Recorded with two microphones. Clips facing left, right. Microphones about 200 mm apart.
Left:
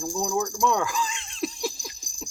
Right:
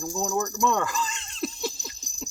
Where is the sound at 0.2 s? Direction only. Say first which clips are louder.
Even; 5° right (ahead or behind).